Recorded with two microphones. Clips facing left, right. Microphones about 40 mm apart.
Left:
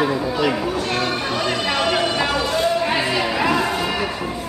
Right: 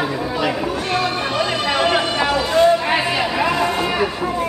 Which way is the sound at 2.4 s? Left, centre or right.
Centre.